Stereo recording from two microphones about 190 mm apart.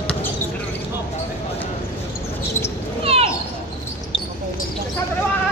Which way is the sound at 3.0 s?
30° right (ahead or behind).